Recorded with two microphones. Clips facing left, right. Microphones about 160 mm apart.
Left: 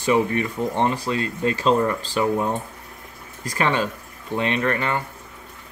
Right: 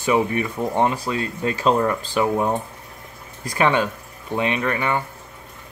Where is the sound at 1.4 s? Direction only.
15° right (ahead or behind).